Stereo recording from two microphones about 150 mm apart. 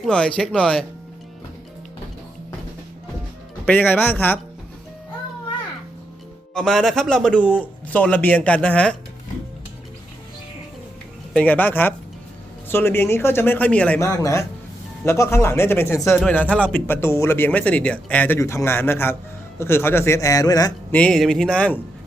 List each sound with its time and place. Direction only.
0.0 s speech: 5° left (ahead or behind)
3.7 s speech: 10° left (ahead or behind)
6.5 s speech: 5° left (ahead or behind)
11.3 s speech: 10° left (ahead or behind)
20.9 s speech: 5° left (ahead or behind)